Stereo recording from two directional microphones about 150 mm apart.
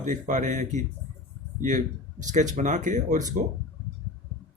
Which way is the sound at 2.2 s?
55° right (ahead or behind).